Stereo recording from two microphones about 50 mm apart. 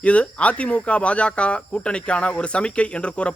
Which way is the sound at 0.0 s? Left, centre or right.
Left.